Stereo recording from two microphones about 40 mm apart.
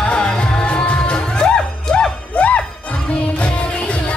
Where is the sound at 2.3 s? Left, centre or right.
Left.